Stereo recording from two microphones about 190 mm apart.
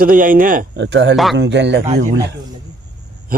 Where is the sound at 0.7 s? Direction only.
70° right (ahead or behind).